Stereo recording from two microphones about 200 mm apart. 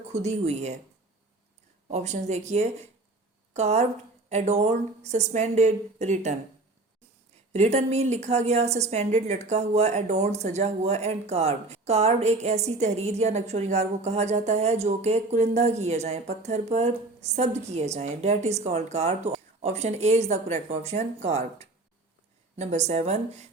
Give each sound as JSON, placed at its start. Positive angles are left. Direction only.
{"t": 0.1, "sound": "a woman's voice", "side_deg": -35}
{"t": 1.9, "sound": "a woman's voice", "side_deg": -35}
{"t": 7.5, "sound": "a woman's voice", "side_deg": -35}